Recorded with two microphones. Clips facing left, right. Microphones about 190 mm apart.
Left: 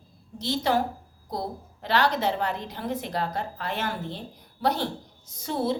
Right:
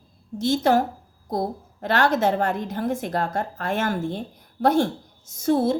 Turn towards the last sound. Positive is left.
turn(degrees=-45)  # may be behind; listen again after turning